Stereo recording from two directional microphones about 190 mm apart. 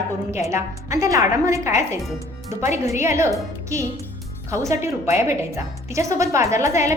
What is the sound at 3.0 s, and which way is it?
Speech, 15° right (ahead or behind).